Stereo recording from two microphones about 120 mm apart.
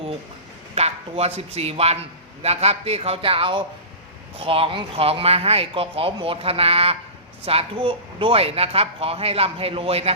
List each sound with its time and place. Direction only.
0.8 s speech: 60° right (ahead or behind)